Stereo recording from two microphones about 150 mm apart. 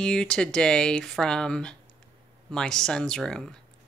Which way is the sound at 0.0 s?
5° left (ahead or behind).